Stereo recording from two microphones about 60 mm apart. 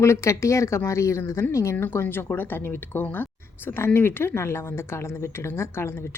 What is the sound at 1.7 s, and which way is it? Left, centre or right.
Speech, left.